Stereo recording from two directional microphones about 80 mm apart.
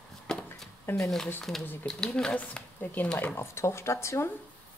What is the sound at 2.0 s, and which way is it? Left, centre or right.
Speech, centre.